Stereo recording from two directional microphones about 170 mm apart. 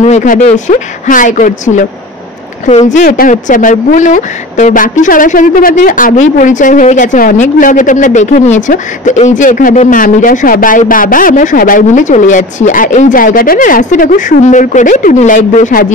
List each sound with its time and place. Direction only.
0.0 s speech: 45° left (ahead or behind)
3.1 s speech: 55° left (ahead or behind)